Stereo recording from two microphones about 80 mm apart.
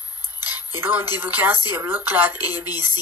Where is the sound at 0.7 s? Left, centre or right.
Right.